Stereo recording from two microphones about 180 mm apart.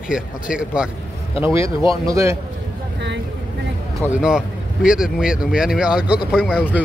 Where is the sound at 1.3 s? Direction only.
30° left (ahead or behind).